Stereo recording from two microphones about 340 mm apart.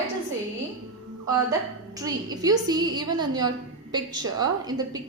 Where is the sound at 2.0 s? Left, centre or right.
Centre.